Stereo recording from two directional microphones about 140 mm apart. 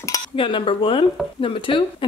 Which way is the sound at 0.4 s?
40° left (ahead or behind).